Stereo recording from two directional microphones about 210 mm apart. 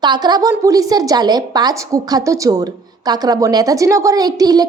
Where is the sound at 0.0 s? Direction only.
20° right (ahead or behind).